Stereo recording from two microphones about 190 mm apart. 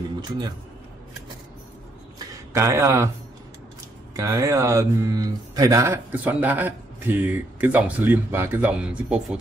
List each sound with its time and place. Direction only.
2.5 s speech: 15° right (ahead or behind)
4.2 s speech: 15° right (ahead or behind)